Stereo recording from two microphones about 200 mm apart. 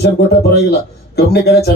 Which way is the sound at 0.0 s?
55° left (ahead or behind).